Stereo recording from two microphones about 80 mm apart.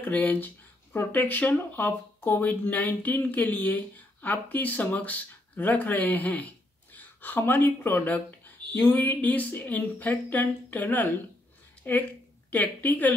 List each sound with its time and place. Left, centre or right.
0.0 s a woman's voice: left